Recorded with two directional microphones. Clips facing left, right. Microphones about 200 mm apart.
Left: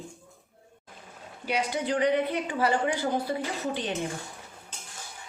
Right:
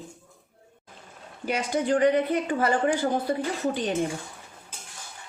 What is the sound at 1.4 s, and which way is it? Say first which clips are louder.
A woman's voice: right 3 dB; 45° right (ahead or behind).